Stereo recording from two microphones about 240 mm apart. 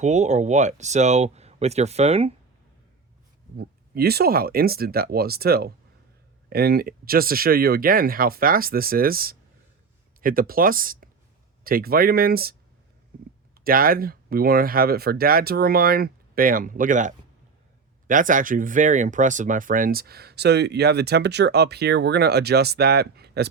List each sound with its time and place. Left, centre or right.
0.0 s speech: right
3.6 s speech: right